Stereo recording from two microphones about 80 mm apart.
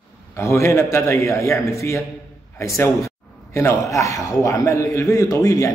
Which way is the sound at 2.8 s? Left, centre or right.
Left.